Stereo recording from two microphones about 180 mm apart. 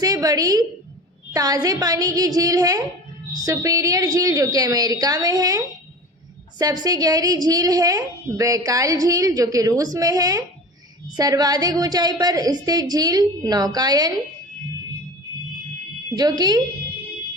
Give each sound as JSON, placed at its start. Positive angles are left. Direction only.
{"t": 0.0, "sound": "a woman's voice", "side_deg": -20}
{"t": 16.1, "sound": "a woman's voice", "side_deg": -20}